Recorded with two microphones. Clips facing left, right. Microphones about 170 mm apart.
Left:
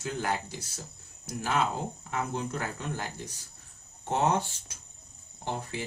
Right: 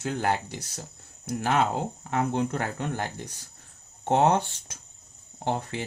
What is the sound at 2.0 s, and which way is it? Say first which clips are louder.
Speech: right 7 dB; 65° right (ahead or behind).